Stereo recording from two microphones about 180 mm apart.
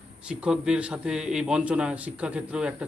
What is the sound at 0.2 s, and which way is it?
Speech, 5° right (ahead or behind).